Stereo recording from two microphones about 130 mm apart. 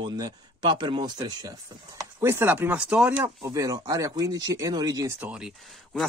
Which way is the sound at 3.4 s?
25° right (ahead or behind).